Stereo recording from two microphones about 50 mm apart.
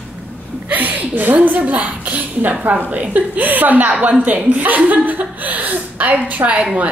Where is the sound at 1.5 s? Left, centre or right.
Right.